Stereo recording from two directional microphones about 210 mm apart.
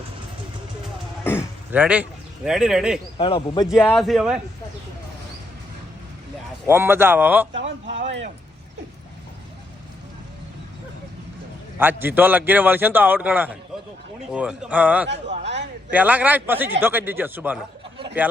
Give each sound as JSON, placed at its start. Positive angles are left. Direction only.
{"t": 1.2, "sound": "throat clearing", "side_deg": 10}
{"t": 1.7, "sound": "speech", "side_deg": -5}
{"t": 3.2, "sound": "speech", "side_deg": 25}
{"t": 3.8, "sound": "a man's voice", "side_deg": 5}
{"t": 6.7, "sound": "a man's voice", "side_deg": -10}
{"t": 7.5, "sound": "speech", "side_deg": -60}
{"t": 11.8, "sound": "a man's voice", "side_deg": -10}